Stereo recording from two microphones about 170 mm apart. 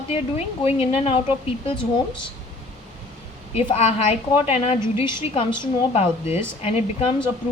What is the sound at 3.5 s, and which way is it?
Speech, 35° left (ahead or behind).